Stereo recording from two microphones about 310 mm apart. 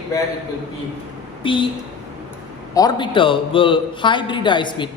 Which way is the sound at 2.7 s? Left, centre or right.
Centre.